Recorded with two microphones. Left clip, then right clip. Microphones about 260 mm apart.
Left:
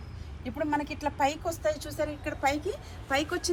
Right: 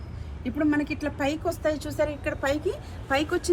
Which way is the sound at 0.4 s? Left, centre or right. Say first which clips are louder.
Right 4 dB; centre.